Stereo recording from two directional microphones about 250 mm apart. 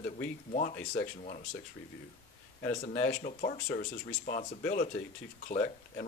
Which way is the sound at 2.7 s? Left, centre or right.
Left.